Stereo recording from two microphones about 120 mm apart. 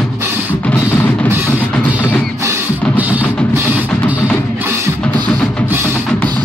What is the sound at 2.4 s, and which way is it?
Drum, 15° right (ahead or behind).